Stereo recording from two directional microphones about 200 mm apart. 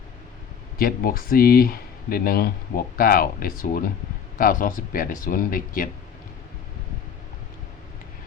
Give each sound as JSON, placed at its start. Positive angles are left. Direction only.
{"t": 0.8, "sound": "speech", "side_deg": 45}